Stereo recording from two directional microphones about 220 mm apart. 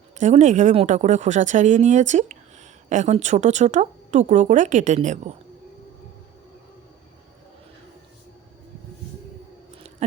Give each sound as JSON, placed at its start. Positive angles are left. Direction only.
{"t": 0.2, "sound": "speech", "side_deg": -30}